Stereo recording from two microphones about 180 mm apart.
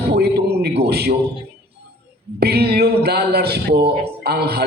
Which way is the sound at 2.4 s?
65° right (ahead or behind).